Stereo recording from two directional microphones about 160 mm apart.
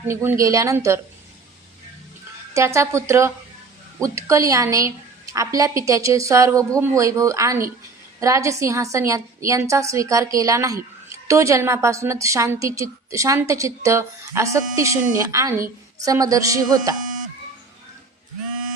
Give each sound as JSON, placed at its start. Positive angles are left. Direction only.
{"t": 0.1, "sound": "a woman's voice", "side_deg": -15}
{"t": 2.5, "sound": "a woman's voice", "side_deg": -20}